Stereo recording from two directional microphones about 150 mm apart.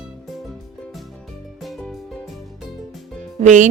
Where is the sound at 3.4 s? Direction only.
55° right (ahead or behind).